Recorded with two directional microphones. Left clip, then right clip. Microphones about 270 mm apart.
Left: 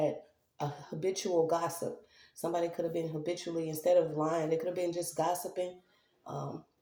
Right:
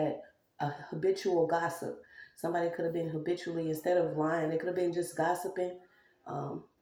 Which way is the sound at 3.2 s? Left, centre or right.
Left.